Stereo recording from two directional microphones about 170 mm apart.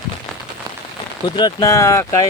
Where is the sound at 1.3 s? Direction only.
20° left (ahead or behind).